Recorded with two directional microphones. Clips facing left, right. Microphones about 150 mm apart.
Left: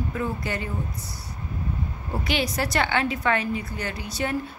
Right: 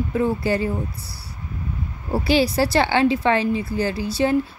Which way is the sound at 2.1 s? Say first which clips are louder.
Right 8 dB; 30° right (ahead or behind).